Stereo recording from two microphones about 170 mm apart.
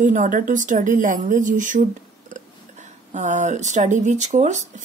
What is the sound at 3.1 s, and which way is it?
A woman's voice, 45° right (ahead or behind).